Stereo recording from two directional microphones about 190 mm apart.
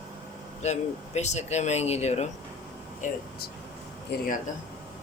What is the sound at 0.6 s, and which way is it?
Speech, 35° left (ahead or behind).